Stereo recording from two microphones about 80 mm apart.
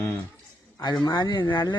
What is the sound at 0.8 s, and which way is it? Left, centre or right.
Speech, left.